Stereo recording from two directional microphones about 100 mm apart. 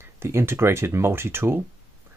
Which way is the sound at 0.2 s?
25° right (ahead or behind).